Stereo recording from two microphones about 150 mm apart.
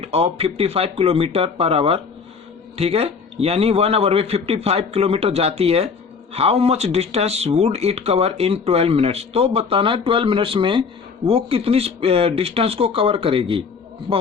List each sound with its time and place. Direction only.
0.0 s a man's voice: 40° right (ahead or behind)